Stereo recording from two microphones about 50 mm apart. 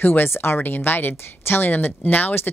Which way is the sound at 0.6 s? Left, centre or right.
Left.